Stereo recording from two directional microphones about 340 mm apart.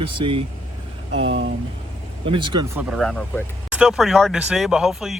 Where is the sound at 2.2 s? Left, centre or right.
Centre.